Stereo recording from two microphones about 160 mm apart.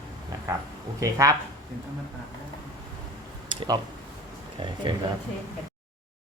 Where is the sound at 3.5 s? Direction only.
30° right (ahead or behind).